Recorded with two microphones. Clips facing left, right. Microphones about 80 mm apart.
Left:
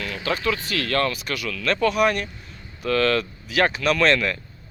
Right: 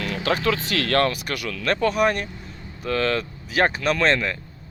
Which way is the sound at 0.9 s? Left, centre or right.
Right.